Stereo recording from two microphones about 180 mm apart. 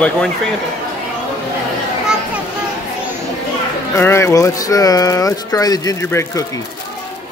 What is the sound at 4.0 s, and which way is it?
Speech, 15° left (ahead or behind).